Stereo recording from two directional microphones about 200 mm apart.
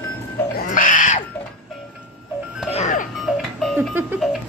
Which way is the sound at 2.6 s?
35° left (ahead or behind).